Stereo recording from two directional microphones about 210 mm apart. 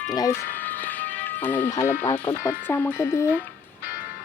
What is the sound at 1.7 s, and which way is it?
Speech, 10° left (ahead or behind).